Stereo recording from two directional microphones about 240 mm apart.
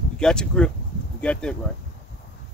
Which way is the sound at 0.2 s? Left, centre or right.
Centre.